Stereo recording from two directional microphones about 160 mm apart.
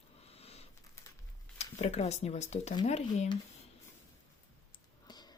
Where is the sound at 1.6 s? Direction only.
45° left (ahead or behind).